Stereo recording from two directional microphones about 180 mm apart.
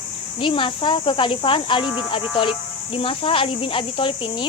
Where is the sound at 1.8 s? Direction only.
5° right (ahead or behind).